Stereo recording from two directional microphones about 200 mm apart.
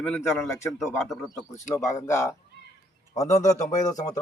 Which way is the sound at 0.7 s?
Centre (ahead or behind).